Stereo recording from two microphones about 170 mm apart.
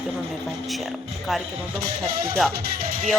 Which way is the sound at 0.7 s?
Centre (ahead or behind).